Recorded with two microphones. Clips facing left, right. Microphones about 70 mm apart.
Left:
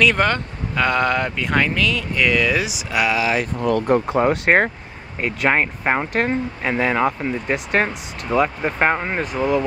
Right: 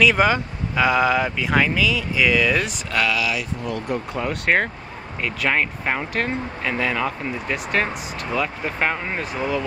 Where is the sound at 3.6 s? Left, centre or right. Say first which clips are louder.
Left 8 dB; left.